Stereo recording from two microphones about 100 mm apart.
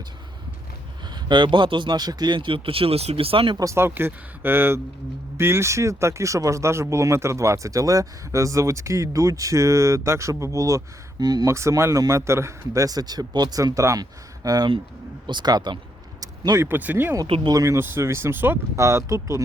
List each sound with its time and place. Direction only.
1.0 s speech: 50° right (ahead or behind)
3.6 s speech: 30° right (ahead or behind); by 15.8 s 45° right (ahead or behind)
16.6 s speech: 20° right (ahead or behind)
17.5 s speech: 35° right (ahead or behind)
18.8 s speech: 30° right (ahead or behind)